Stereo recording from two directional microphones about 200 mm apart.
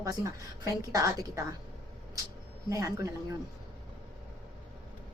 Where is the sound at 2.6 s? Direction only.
15° right (ahead or behind).